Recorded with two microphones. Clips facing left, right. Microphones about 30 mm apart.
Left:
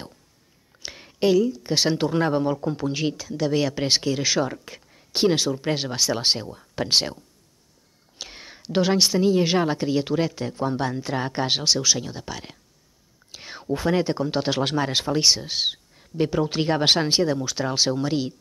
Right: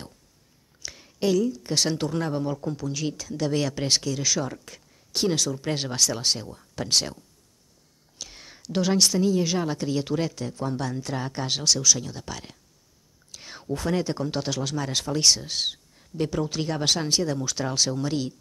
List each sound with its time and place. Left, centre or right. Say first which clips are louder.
0.8 s speech: left 4 dB; left
3.2 s speech: left 3 dB; centre
14.6 s speech: left 6 dB; left
14.9 s speech: right 2 dB; left
17.3 s speech: left 3 dB; centre